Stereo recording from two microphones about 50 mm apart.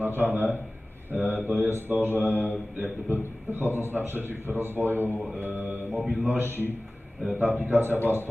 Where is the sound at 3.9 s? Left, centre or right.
Right.